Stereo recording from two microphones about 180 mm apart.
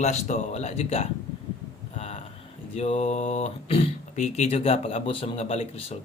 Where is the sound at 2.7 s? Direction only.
35° left (ahead or behind).